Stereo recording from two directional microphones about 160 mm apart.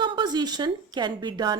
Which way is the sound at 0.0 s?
25° right (ahead or behind).